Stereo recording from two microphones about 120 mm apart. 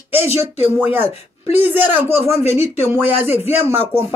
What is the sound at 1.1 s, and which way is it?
Speech, 60° left (ahead or behind).